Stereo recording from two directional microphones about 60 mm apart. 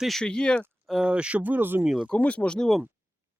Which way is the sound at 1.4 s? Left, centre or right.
Right.